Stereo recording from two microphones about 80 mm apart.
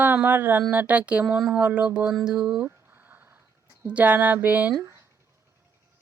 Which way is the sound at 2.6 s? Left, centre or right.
Right.